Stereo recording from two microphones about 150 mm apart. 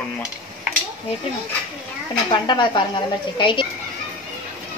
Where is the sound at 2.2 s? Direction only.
30° left (ahead or behind).